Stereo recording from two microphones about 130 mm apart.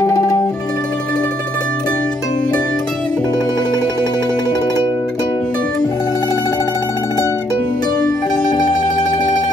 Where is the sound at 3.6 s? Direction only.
30° left (ahead or behind).